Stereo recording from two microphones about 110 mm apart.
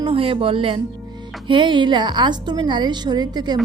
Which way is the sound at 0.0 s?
55° right (ahead or behind).